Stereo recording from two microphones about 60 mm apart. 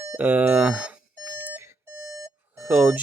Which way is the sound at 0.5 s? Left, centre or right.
Centre.